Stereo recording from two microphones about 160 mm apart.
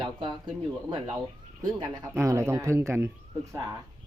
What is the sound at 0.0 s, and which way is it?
Speech, 25° right (ahead or behind).